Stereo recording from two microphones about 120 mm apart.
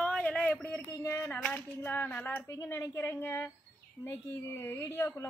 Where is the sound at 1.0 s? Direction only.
20° left (ahead or behind).